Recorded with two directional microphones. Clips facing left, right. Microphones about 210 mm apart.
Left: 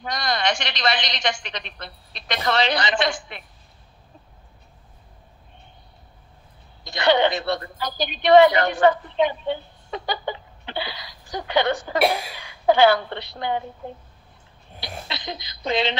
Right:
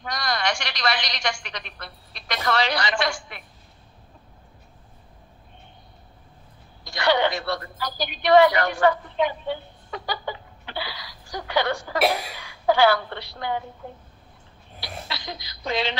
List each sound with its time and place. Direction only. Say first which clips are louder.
0.0 s a woman's voice: left 2 dB; 20° left (ahead or behind)
6.8 s a woman's voice: left 3 dB; 20° left (ahead or behind)
14.8 s a sound: left 1 dB; 20° left (ahead or behind)